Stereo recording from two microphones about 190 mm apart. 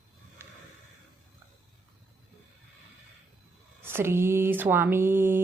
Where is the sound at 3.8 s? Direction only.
10° right (ahead or behind).